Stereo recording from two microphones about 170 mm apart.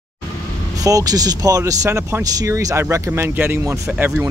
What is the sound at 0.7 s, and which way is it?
Speech, 20° right (ahead or behind).